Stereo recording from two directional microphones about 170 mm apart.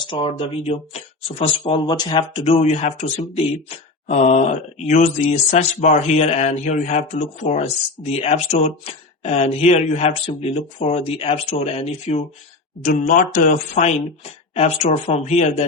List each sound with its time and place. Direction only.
0.1 s speech: 30° left (ahead or behind)
12.8 s speech: 55° left (ahead or behind)